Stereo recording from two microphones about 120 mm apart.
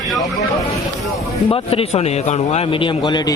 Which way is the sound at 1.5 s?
55° left (ahead or behind).